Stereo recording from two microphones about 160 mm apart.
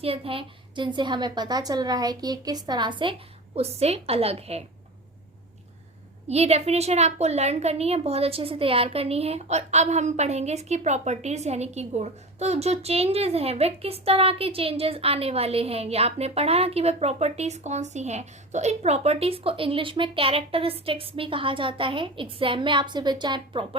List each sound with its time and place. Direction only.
0.0 s a woman's voice: 35° right (ahead or behind)
6.2 s a woman's voice: 40° right (ahead or behind)